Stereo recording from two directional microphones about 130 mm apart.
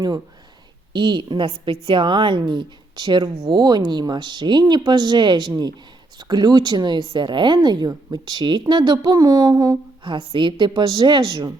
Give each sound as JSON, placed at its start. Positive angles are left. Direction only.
{"t": 0.9, "sound": "speech", "side_deg": -35}
{"t": 10.0, "sound": "speech", "side_deg": -40}